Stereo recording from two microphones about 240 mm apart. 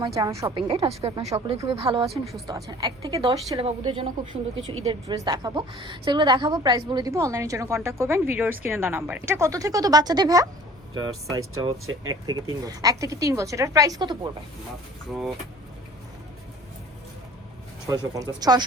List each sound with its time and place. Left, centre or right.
0.0 s a woman's voice: centre
4.5 s a woman's voice: right
4.8 s a woman's voice: centre
17.8 s a woman's voice: centre